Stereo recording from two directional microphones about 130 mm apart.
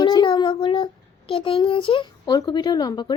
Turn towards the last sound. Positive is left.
turn(degrees=30)  # may be behind; listen again after turning